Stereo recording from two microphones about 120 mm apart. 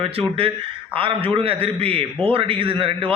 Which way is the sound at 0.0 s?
50° right (ahead or behind).